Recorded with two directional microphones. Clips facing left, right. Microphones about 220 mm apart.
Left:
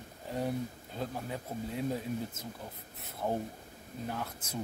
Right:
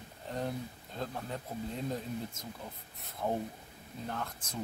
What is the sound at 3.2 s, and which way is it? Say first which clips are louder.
Speech: even; 5° left (ahead or behind).